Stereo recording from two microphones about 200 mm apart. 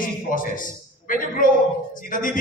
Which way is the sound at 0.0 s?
40° left (ahead or behind).